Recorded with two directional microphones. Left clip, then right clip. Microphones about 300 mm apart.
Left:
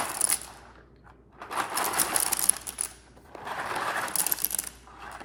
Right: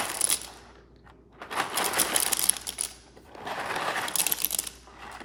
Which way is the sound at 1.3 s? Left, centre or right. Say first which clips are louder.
Right 1 dB; centre.